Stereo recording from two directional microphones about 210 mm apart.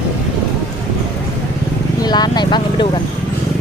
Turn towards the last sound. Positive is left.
turn(degrees=20)  # may be behind; listen again after turning